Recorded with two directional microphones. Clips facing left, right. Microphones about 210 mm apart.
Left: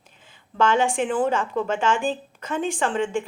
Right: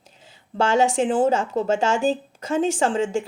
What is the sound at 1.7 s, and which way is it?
Speech, 45° right (ahead or behind).